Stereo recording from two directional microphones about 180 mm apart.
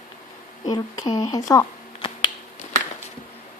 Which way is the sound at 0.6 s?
25° left (ahead or behind).